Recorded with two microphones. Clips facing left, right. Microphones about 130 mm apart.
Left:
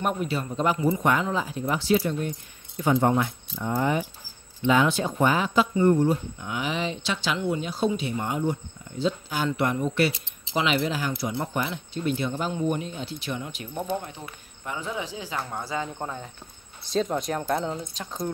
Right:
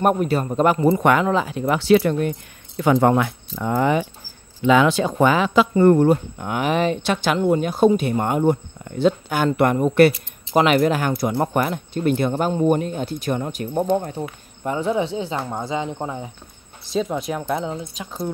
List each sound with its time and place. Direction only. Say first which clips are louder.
0.0 s speech: right 8 dB; 50° right (ahead or behind); by 2.3 s 70° right (ahead or behind)
2.8 s speech: right 5 dB; 90° right; by 16.3 s 15° right (ahead or behind)
16.9 s speech: right 3 dB; 5° right (ahead or behind)